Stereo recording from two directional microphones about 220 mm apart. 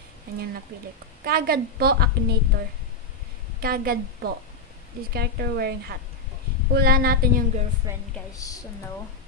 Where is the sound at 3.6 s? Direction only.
40° right (ahead or behind).